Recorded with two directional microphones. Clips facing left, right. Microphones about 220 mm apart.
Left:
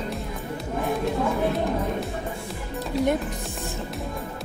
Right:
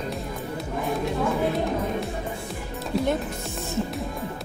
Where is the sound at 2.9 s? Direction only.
Centre (ahead or behind).